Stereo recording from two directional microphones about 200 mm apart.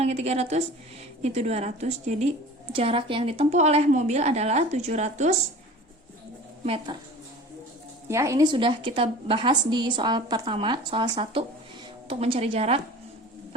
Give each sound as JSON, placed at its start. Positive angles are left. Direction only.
{"t": 0.0, "sound": "a woman's voice", "side_deg": -30}
{"t": 6.7, "sound": "a woman's voice", "side_deg": -25}
{"t": 8.0, "sound": "a woman's voice", "side_deg": -15}